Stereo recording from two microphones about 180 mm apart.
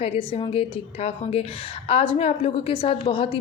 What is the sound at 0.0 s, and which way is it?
A woman's voice, 30° left (ahead or behind).